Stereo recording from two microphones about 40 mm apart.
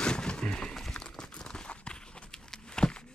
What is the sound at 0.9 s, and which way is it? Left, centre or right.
Clip-clop, left.